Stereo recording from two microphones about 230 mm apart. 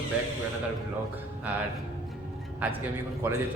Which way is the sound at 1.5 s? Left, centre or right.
Centre.